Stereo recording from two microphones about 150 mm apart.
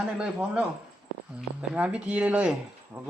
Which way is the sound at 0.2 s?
5° right (ahead or behind).